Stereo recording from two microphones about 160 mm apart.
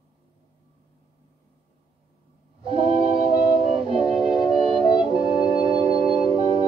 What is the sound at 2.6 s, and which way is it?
Music, 35° right (ahead or behind).